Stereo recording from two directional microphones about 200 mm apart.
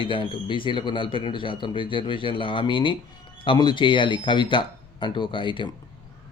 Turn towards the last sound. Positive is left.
turn(degrees=25)  # may be behind; listen again after turning